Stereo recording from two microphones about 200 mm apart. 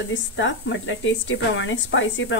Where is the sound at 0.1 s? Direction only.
70° left (ahead or behind).